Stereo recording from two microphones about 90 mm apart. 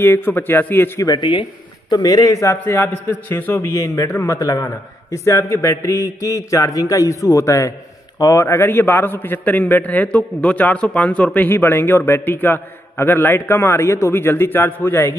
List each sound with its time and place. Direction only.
0.0 s a man's voice: 25° left (ahead or behind)
1.0 s speech: 55° left (ahead or behind)
2.0 s a man's voice: 50° left (ahead or behind)
2.4 s a man's voice: 30° left (ahead or behind)
3.7 s a man's voice: 35° left (ahead or behind)